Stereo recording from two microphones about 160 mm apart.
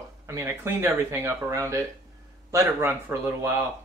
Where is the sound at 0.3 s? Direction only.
15° right (ahead or behind).